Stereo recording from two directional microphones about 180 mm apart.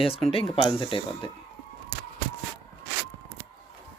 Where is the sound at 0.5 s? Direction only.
30° left (ahead or behind).